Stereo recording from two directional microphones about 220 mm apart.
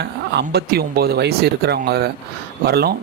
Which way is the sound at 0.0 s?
50° right (ahead or behind).